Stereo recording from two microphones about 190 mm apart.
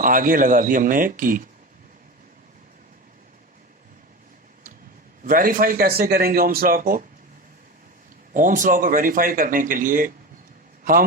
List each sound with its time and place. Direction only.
0.0 s speech: 45° right (ahead or behind)
5.2 s speech: 45° right (ahead or behind)
8.3 s speech: 45° right (ahead or behind)